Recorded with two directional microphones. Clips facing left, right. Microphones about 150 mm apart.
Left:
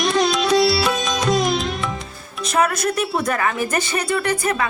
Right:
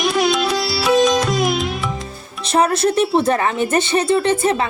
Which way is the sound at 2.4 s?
30° right (ahead or behind).